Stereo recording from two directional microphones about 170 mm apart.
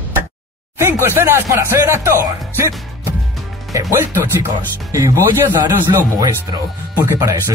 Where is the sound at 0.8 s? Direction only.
15° right (ahead or behind).